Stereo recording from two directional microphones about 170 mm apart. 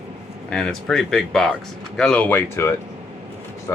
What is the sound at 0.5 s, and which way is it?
Speech, 5° left (ahead or behind).